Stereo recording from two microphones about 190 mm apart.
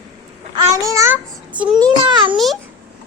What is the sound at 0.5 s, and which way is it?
A child's voice, 15° right (ahead or behind).